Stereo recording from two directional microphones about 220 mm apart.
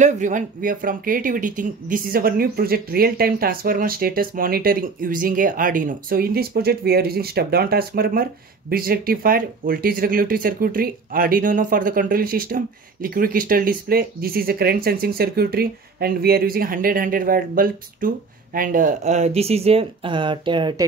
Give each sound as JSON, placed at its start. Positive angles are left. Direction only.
{"t": 0.0, "sound": "speech", "side_deg": -35}